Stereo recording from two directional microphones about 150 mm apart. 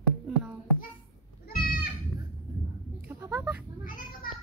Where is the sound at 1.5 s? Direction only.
75° left (ahead or behind).